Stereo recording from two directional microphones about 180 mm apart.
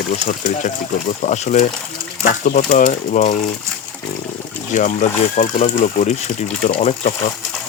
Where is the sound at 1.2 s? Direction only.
40° left (ahead or behind).